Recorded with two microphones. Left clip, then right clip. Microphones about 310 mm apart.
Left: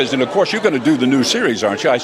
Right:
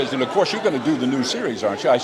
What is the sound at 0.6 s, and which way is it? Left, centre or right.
A man's voice, left.